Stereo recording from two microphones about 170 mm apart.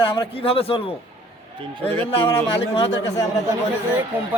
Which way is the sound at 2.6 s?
35° left (ahead or behind).